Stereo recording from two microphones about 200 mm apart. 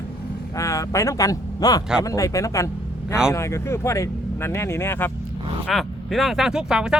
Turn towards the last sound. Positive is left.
turn(degrees=-5)  # may be behind; listen again after turning